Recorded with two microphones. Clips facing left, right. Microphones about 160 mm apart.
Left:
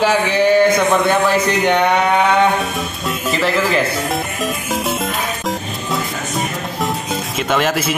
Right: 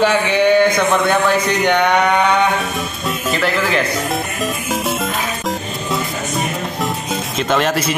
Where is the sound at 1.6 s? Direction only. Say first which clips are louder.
Right 1 dB; 5° left (ahead or behind).